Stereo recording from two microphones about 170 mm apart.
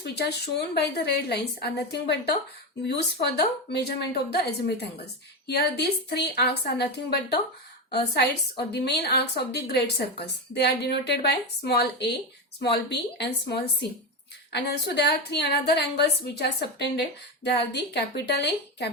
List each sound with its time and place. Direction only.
0.0 s a woman's voice: 75° left (ahead or behind)